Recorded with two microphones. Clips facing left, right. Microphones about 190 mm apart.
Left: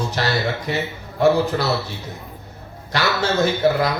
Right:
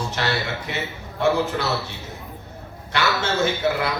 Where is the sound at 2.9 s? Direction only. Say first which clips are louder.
Left 2 dB; 35° left (ahead or behind).